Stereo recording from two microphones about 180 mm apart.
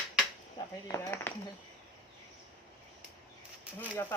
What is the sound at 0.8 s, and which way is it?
Speech, 15° left (ahead or behind).